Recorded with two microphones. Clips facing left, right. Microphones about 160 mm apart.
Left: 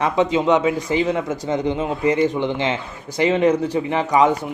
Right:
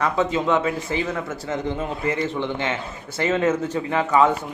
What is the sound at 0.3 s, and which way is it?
Speech, 15° left (ahead or behind).